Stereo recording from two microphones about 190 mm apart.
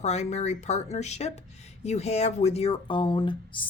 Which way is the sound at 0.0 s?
35° left (ahead or behind).